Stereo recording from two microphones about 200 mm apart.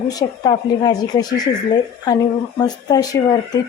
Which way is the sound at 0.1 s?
20° left (ahead or behind).